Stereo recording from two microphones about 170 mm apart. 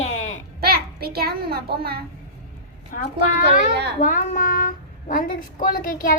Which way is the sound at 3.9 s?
50° left (ahead or behind).